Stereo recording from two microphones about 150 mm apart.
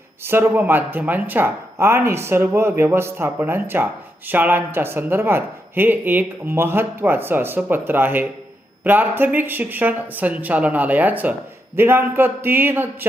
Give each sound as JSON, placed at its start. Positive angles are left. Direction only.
{"t": 0.3, "sound": "speech", "side_deg": -15}